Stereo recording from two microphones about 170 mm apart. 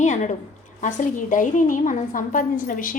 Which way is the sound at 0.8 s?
50° left (ahead or behind).